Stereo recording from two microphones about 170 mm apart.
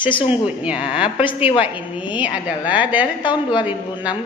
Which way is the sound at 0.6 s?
5° right (ahead or behind).